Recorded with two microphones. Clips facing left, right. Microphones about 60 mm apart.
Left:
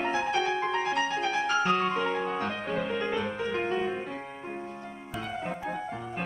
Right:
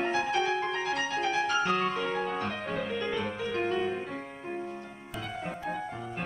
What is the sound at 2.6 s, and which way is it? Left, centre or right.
Music, centre.